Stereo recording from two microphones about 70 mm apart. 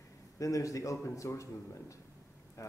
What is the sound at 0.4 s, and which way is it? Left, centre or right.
A man's voice, left.